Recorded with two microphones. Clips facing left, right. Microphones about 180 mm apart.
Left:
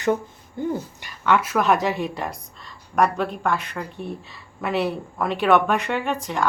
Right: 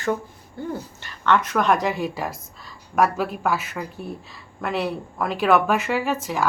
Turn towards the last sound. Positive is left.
turn(degrees=-5)  # may be behind; listen again after turning